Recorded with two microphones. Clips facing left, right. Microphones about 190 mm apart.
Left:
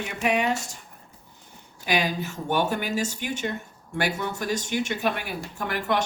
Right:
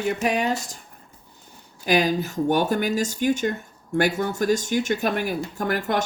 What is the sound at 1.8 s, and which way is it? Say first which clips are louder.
Speech: right 5 dB; 40° right (ahead or behind).